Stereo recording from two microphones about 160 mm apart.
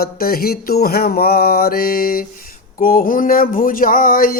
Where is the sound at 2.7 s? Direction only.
60° left (ahead or behind).